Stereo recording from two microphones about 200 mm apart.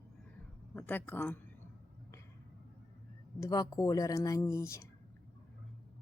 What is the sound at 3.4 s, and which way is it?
Speech, 20° left (ahead or behind).